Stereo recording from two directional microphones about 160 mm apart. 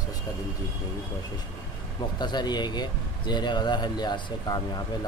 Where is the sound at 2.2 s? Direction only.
25° left (ahead or behind).